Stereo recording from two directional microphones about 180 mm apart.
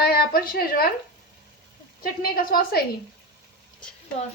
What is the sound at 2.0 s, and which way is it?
Speech, 55° left (ahead or behind).